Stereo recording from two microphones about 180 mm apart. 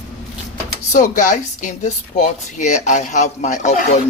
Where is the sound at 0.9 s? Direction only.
45° left (ahead or behind).